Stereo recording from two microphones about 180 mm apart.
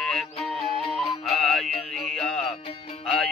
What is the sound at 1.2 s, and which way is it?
Music, centre (ahead or behind).